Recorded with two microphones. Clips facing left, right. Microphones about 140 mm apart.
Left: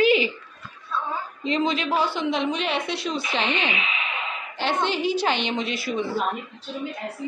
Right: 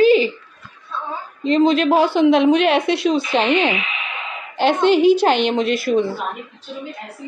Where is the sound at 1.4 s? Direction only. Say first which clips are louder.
Right 9 dB; 45° right (ahead or behind).